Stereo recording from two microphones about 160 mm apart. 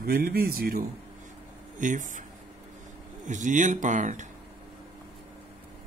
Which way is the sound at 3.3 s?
50° right (ahead or behind).